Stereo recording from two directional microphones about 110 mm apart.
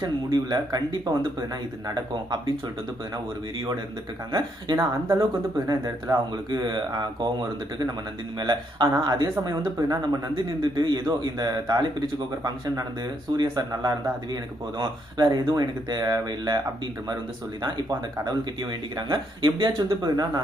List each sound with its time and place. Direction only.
0.0 s speech: 40° right (ahead or behind)
4.3 s speech: 35° right (ahead or behind)
6.5 s speech: 45° right (ahead or behind)
8.4 s speech: 40° right (ahead or behind)